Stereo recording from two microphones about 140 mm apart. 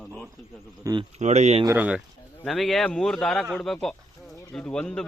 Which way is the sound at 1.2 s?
55° right (ahead or behind).